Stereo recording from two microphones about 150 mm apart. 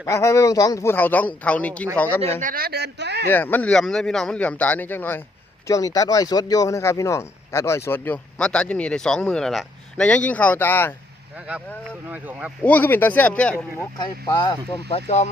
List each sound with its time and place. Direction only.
0.0 s speech: 20° left (ahead or behind)
2.4 s speech: 75° right (ahead or behind)
3.2 s speech: 15° left (ahead or behind)
11.3 s speech: 5° right (ahead or behind)
12.6 s speech: 10° left (ahead or behind)
14.0 s speech: 30° left (ahead or behind); by 15.3 s 45° left (ahead or behind)